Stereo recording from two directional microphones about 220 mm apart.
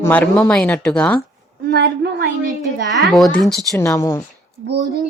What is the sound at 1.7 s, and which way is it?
Speech, 50° right (ahead or behind).